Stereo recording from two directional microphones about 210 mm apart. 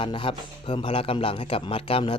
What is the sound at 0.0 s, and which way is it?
A man's voice, 25° left (ahead or behind).